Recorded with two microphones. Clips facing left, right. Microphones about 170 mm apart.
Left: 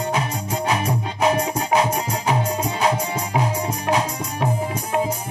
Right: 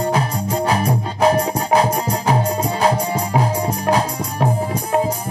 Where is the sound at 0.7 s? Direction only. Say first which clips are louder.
Right 1 dB; 35° right (ahead or behind).